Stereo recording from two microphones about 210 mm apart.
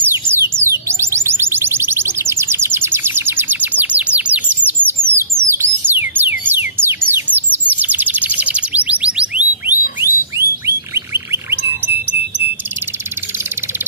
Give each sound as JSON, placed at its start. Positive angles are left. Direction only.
{"t": 0.1, "sound": "chirp tone", "side_deg": -10}
{"t": 5.5, "sound": "a sound", "side_deg": -10}
{"t": 7.5, "sound": "bird", "side_deg": -10}
{"t": 11.0, "sound": "chirp", "side_deg": -10}